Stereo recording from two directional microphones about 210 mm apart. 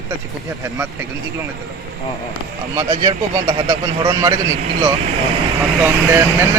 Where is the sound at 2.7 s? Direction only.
20° right (ahead or behind).